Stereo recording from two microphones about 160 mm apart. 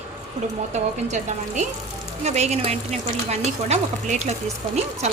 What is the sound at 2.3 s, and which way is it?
A woman's voice, 45° right (ahead or behind).